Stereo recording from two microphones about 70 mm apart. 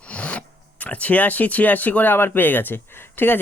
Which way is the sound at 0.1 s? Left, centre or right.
Centre.